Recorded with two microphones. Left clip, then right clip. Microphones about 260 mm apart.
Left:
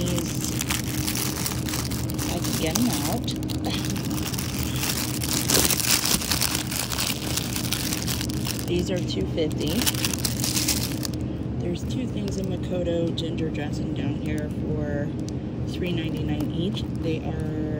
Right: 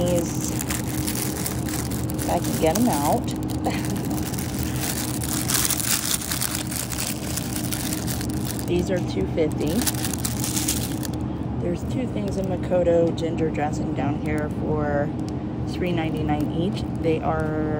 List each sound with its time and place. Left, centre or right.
2.3 s speech: centre
5.5 s a sound: centre
8.7 s speech: centre
12.8 s speech: centre
16.3 s speech: right